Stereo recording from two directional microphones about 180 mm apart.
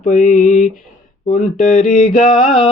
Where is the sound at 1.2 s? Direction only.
45° left (ahead or behind).